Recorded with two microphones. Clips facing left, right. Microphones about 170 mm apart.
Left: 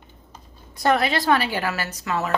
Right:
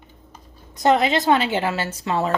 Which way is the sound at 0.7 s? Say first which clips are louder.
Right 3 dB; 20° right (ahead or behind).